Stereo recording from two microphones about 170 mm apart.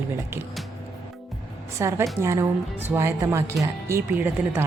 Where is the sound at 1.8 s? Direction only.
15° right (ahead or behind).